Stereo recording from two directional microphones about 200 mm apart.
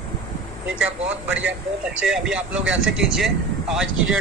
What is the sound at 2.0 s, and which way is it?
Speech, 5° right (ahead or behind).